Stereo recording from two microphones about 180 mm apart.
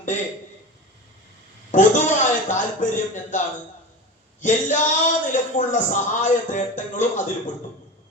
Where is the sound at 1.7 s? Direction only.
45° left (ahead or behind).